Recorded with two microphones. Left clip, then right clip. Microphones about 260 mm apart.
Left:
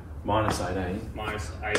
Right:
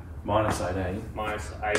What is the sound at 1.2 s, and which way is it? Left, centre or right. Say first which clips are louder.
Speech: right 4 dB; centre.